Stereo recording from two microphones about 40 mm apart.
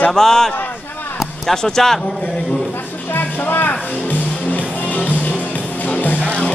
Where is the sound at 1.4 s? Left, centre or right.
Centre.